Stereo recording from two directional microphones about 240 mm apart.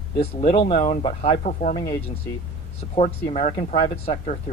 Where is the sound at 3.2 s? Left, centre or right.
Left.